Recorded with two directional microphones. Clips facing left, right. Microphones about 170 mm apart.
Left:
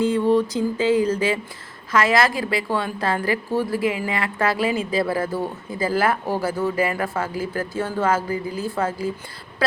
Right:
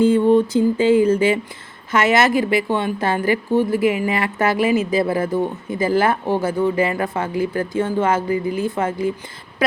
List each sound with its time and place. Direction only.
0.0 s speech: 25° right (ahead or behind)